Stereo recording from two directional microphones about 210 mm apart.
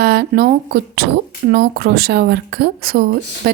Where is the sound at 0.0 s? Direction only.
45° right (ahead or behind).